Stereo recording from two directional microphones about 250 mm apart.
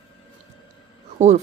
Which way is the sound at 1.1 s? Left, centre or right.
Right.